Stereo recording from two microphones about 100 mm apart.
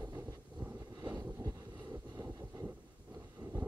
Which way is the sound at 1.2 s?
30° right (ahead or behind).